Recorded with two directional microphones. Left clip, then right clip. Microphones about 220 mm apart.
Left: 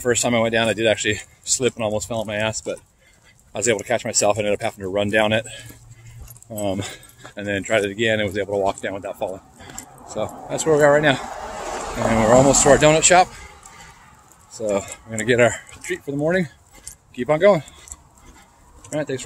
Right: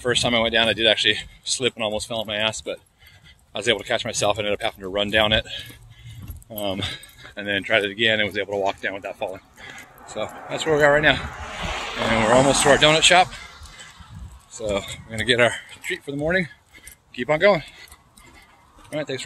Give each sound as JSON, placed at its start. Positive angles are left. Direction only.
{"t": 0.0, "sound": "speech", "side_deg": 5}
{"t": 12.3, "sound": "speech", "side_deg": 45}
{"t": 12.6, "sound": "speech", "side_deg": 10}
{"t": 14.6, "sound": "speech", "side_deg": 15}
{"t": 18.9, "sound": "speech", "side_deg": 10}